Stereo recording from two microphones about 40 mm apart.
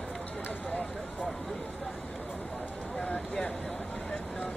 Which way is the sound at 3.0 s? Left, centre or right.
Left.